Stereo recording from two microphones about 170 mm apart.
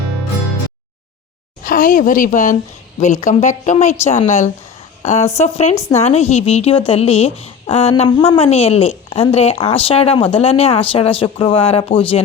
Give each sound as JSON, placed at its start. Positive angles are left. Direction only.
{"t": 1.6, "sound": "a woman's voice", "side_deg": 50}